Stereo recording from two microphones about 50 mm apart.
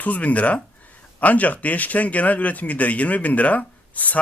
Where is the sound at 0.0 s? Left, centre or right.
Left.